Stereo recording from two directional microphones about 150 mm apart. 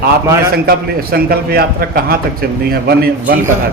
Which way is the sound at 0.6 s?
90° right.